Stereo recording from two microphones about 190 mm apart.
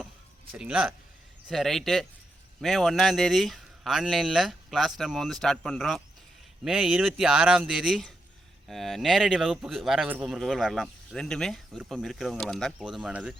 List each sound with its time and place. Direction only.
0.5 s speech: 5° right (ahead or behind)